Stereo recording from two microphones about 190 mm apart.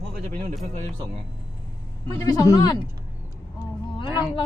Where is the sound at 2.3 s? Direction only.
15° left (ahead or behind).